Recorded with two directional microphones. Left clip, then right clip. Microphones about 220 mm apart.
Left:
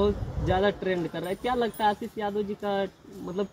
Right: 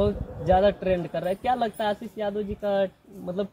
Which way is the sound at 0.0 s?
20° right (ahead or behind).